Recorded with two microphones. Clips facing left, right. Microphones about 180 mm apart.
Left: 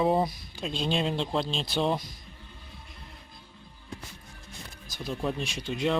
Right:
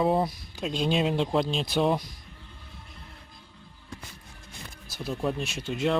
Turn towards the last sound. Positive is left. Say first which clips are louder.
# right 1 dB
turn(degrees=0)  # may be behind; listen again after turning